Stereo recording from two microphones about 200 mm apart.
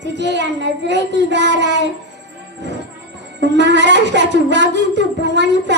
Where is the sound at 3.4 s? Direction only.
60° right (ahead or behind).